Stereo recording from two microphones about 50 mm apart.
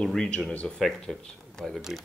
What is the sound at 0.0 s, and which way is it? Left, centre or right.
Speech, centre.